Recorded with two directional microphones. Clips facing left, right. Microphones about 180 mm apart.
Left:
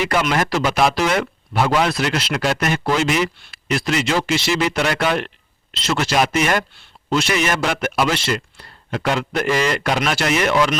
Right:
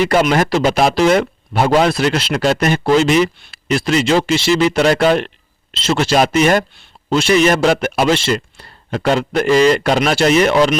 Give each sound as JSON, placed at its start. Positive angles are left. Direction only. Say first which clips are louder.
{"t": 0.1, "sound": "speech", "louder": "right 5 dB", "side_deg": -35}